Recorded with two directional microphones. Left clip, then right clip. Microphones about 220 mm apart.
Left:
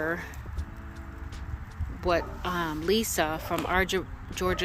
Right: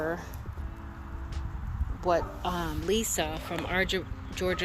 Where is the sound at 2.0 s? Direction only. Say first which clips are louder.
Even; 10° left (ahead or behind).